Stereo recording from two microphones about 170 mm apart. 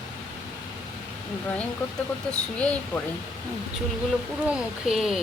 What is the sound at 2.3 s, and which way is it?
Speech, 5° left (ahead or behind).